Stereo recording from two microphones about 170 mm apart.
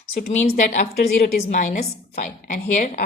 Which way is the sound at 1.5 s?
45° left (ahead or behind).